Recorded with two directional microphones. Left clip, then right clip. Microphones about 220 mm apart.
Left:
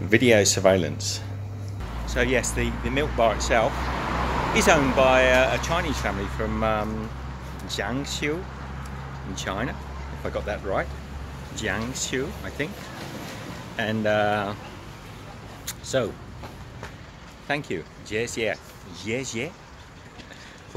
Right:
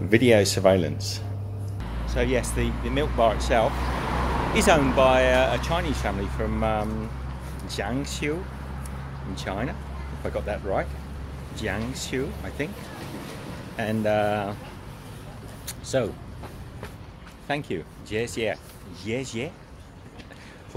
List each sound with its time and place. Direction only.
0.1 s speech: centre (ahead or behind)
3.7 s vehicle: 45° right (ahead or behind)
4.6 s speech: 5° right (ahead or behind)
13.7 s speech: centre (ahead or behind)
15.6 s a sound: centre (ahead or behind)
17.5 s speech: centre (ahead or behind)